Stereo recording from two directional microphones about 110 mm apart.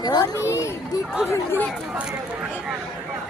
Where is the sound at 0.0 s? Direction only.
40° left (ahead or behind).